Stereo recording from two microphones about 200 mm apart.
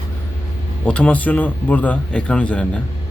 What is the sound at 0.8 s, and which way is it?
Speech, 5° left (ahead or behind).